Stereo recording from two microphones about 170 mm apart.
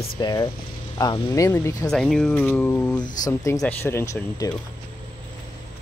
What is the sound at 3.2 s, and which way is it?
Speech, 20° left (ahead or behind).